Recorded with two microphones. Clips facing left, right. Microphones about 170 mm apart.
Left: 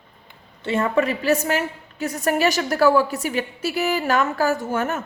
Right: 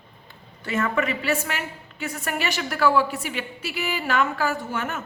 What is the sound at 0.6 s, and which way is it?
A woman's voice, 30° left (ahead or behind).